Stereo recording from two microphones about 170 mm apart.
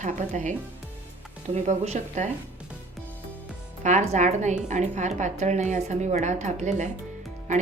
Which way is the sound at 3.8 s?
45° right (ahead or behind).